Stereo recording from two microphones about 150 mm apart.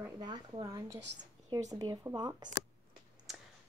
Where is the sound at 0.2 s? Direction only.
25° right (ahead or behind).